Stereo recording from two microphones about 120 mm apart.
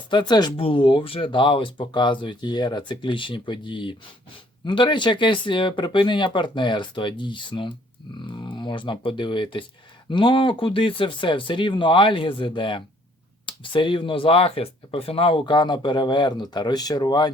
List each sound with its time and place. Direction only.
0.1 s speech: 40° left (ahead or behind)